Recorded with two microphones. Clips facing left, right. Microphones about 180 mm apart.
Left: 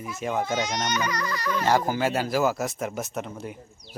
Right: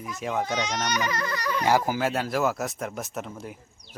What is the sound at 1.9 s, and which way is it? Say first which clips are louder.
A child's voice: left 1 dB; centre (ahead or behind).